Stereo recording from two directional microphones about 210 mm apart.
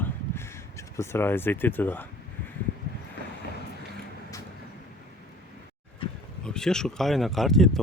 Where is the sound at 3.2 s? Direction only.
55° left (ahead or behind).